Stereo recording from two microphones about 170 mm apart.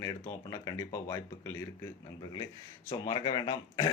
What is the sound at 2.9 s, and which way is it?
Speech, 25° left (ahead or behind).